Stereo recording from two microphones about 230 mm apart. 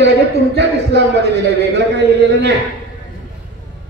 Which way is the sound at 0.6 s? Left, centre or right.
Right.